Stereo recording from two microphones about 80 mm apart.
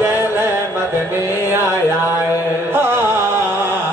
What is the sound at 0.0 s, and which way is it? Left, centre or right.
Chant, right.